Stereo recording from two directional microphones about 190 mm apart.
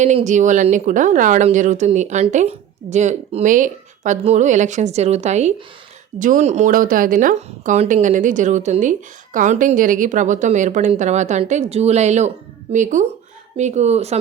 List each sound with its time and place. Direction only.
0.0 s speech: 35° right (ahead or behind)